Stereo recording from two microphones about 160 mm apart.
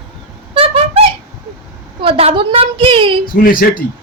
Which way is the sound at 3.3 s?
60° left (ahead or behind).